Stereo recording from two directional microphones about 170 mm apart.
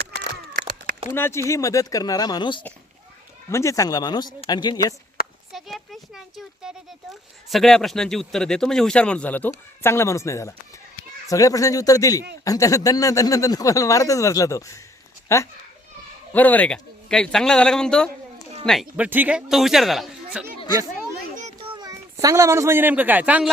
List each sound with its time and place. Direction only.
1.1 s speech: 15° left (ahead or behind)
3.5 s speech: 15° left (ahead or behind)
5.5 s a sound: centre (ahead or behind)
7.5 s a man's voice: 5° left (ahead or behind)
21.3 s children playing: 45° right (ahead or behind)
21.7 s a child's voice: 20° right (ahead or behind)